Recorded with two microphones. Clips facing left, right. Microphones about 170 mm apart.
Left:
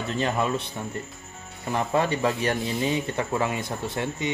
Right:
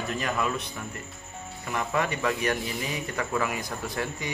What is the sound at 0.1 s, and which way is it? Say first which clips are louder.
A man's voice: left 4 dB; 30° left (ahead or behind).